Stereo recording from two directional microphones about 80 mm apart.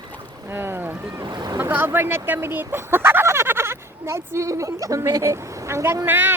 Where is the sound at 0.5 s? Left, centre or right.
Right.